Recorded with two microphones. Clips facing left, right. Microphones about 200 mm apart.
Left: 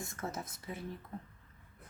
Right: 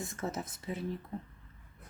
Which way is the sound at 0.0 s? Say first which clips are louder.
Right 4 dB; 25° right (ahead or behind).